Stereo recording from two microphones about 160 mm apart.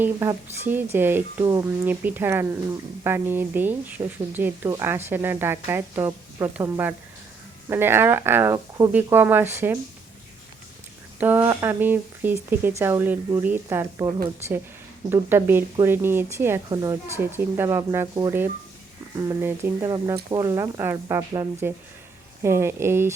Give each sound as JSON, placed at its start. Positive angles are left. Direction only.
{"t": 0.0, "sound": "speech", "side_deg": -15}
{"t": 1.5, "sound": "speech", "side_deg": -25}
{"t": 1.9, "sound": "speech", "side_deg": -10}
{"t": 11.2, "sound": "speech", "side_deg": -10}
{"t": 15.1, "sound": "speech", "side_deg": -15}